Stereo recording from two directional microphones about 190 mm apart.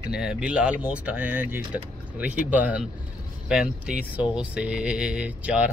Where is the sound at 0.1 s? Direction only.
5° right (ahead or behind).